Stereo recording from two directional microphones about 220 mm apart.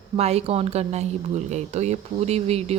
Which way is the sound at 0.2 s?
30° right (ahead or behind).